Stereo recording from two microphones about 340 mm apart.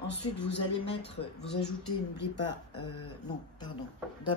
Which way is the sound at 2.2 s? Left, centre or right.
Left.